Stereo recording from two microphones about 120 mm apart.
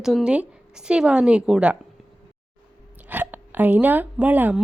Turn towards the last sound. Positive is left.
turn(degrees=-15)  # may be behind; listen again after turning